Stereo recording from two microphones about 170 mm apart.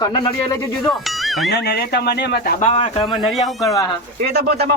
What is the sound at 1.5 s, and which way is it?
Speech, 75° left (ahead or behind).